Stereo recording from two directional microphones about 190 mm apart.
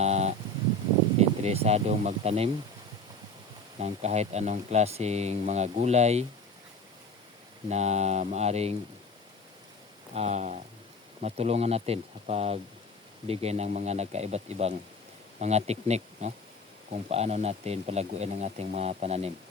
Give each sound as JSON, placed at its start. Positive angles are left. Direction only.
{"t": 0.0, "sound": "a sound", "side_deg": -35}
{"t": 1.4, "sound": "speech", "side_deg": -35}
{"t": 3.8, "sound": "speech", "side_deg": -35}
{"t": 7.7, "sound": "speech", "side_deg": -35}
{"t": 10.2, "sound": "speech", "side_deg": -35}